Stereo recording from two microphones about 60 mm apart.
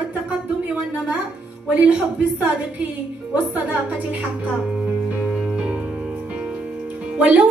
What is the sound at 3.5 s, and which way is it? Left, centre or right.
Speech, right.